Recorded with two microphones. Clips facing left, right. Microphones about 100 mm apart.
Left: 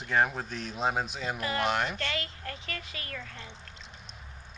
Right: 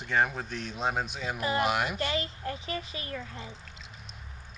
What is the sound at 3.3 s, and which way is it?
Pour, 5° right (ahead or behind).